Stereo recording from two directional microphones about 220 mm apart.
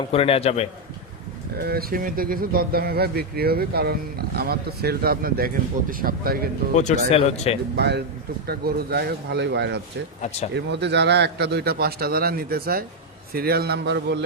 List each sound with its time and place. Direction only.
0.1 s a man's voice: 25° left (ahead or behind)
1.5 s speech: 45° right (ahead or behind)
6.7 s a man's voice: 35° left (ahead or behind)
7.8 s speech: 50° right (ahead or behind)